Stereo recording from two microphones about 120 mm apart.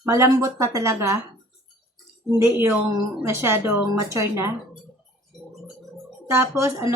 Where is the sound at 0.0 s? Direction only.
25° right (ahead or behind).